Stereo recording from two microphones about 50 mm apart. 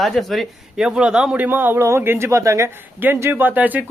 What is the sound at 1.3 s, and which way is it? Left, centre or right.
Speech, right.